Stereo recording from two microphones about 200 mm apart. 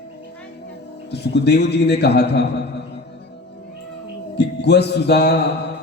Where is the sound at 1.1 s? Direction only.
55° left (ahead or behind).